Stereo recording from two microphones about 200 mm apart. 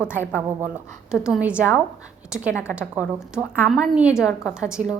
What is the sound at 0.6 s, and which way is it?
A woman's voice, 5° right (ahead or behind).